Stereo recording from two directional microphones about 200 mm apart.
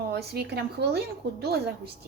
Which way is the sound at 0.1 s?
55° right (ahead or behind).